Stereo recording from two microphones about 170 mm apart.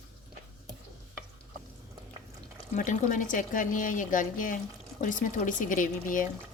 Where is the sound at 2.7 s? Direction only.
50° left (ahead or behind).